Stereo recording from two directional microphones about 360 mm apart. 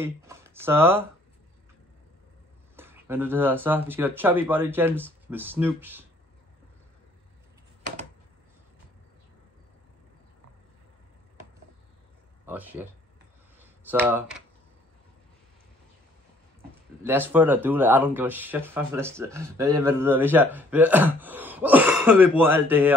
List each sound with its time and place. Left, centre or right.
0.0 s speech: centre
2.7 s speech: centre
12.4 s speech: centre
13.6 s a sound: centre
17.2 s speech: centre